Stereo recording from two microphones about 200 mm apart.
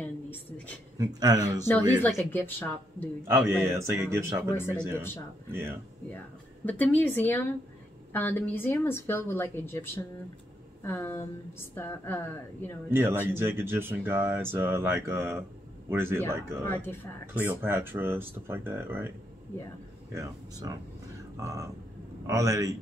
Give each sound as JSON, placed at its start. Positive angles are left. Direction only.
{"t": 0.0, "sound": "a sound", "side_deg": 10}
{"t": 0.9, "sound": "speech", "side_deg": -20}
{"t": 2.0, "sound": "speech", "side_deg": 10}
{"t": 3.3, "sound": "speech", "side_deg": -10}
{"t": 4.6, "sound": "speech", "side_deg": 10}
{"t": 5.5, "sound": "speech", "side_deg": -10}
{"t": 6.6, "sound": "speech", "side_deg": 10}
{"t": 12.9, "sound": "speech", "side_deg": -10}
{"t": 16.6, "sound": "speech", "side_deg": 10}
{"t": 17.3, "sound": "speech", "side_deg": -10}
{"t": 20.2, "sound": "speech", "side_deg": -20}